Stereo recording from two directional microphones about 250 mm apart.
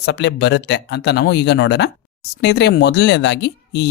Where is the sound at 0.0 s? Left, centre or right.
Left.